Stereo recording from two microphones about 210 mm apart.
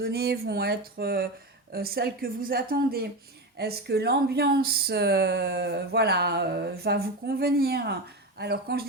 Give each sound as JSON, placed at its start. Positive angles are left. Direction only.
{"t": 0.0, "sound": "speech", "side_deg": -50}